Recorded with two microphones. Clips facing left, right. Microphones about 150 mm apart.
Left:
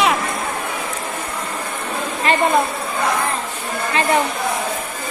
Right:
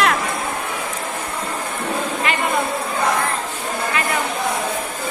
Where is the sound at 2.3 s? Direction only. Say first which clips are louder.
Left 7 dB; 35° left (ahead or behind).